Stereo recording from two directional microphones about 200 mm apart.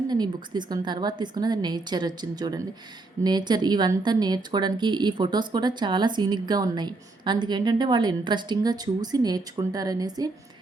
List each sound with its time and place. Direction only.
0.1 s speech: 20° right (ahead or behind)